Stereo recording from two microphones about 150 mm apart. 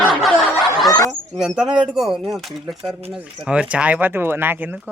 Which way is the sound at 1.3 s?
5° right (ahead or behind).